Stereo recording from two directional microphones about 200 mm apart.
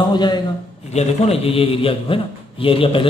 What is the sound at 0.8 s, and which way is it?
A man's voice, 30° left (ahead or behind).